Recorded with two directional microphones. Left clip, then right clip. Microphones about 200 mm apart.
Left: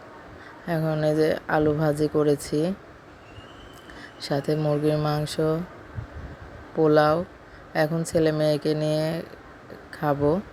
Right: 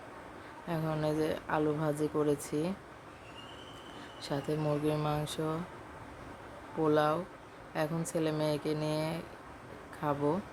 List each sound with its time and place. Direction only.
0.7 s a woman's voice: 20° left (ahead or behind)
4.2 s a woman's voice: 25° left (ahead or behind)
6.8 s a woman's voice: 25° left (ahead or behind)